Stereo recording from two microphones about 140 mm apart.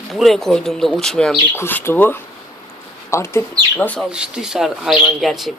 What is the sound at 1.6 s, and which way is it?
Speech, 15° left (ahead or behind).